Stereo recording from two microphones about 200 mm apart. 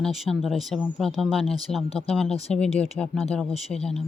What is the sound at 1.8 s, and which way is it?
Speech, 30° left (ahead or behind).